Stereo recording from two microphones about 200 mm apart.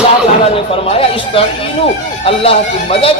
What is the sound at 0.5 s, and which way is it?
A man's voice, 30° left (ahead or behind).